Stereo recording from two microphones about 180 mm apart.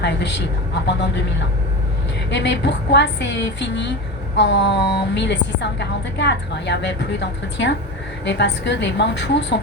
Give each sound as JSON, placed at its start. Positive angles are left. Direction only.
{"t": 0.0, "sound": "a woman's voice", "side_deg": 70}
{"t": 2.3, "sound": "a woman's voice", "side_deg": 75}